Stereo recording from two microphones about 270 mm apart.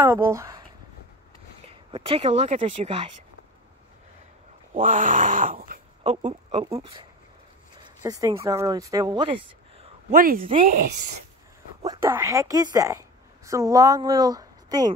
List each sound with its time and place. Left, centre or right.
0.0 s speech: centre
1.7 s speech: right
4.7 s speech: right
10.1 s speech: right
11.8 s speech: centre